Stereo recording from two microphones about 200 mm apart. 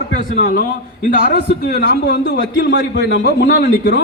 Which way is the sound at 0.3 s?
45° left (ahead or behind).